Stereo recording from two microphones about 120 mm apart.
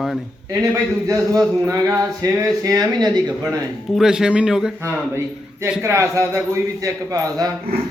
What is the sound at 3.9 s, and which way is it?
Speech, 5° right (ahead or behind).